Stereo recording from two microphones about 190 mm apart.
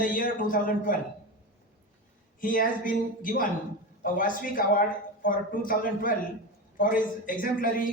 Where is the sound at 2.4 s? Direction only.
45° left (ahead or behind).